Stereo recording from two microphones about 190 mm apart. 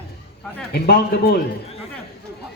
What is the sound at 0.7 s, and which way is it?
Speech, 55° left (ahead or behind).